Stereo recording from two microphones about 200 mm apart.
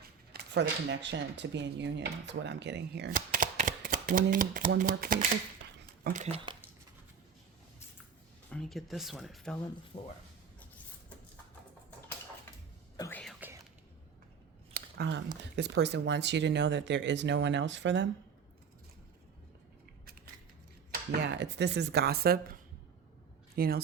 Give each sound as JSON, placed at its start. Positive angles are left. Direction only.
{"t": 0.3, "sound": "speech", "side_deg": -60}
{"t": 3.1, "sound": "shuffling cards", "side_deg": -40}
{"t": 4.8, "sound": "speech", "side_deg": -45}
{"t": 5.8, "sound": "a sound", "side_deg": -50}
{"t": 6.2, "sound": "speech", "side_deg": -30}
{"t": 8.4, "sound": "speech", "side_deg": 5}
{"t": 9.9, "sound": "speech", "side_deg": 35}
{"t": 13.0, "sound": "whispering", "side_deg": 10}
{"t": 14.7, "sound": "a sound", "side_deg": -55}
{"t": 15.5, "sound": "speech", "side_deg": -60}
{"t": 21.2, "sound": "speech", "side_deg": -60}
{"t": 23.6, "sound": "speech", "side_deg": -50}